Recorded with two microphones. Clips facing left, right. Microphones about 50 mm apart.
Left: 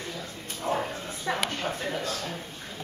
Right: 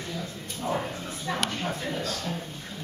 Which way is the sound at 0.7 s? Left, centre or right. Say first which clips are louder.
Left 1 dB; left.